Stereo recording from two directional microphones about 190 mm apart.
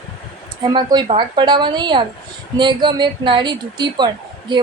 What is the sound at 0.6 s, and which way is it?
Speech, 25° right (ahead or behind).